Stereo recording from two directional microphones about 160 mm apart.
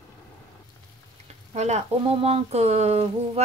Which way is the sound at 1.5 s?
45° right (ahead or behind).